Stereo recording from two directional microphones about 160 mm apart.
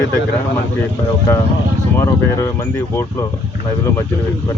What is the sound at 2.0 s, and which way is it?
Speech, 15° left (ahead or behind).